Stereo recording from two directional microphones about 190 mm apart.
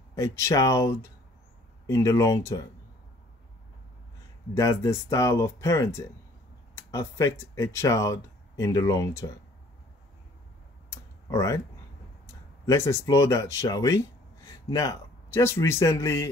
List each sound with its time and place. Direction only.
0.1 s speech: 15° left (ahead or behind)
4.6 s speech: 15° left (ahead or behind)
10.9 s a sound: 15° left (ahead or behind)
12.6 s speech: 15° left (ahead or behind)